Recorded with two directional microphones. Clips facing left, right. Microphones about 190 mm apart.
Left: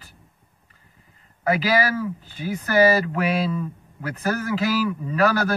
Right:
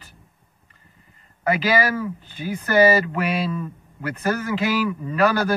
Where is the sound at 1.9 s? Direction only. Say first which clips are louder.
Even; 5° left (ahead or behind).